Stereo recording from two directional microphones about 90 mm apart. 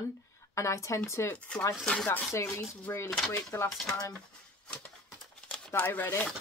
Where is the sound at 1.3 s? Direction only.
15° left (ahead or behind).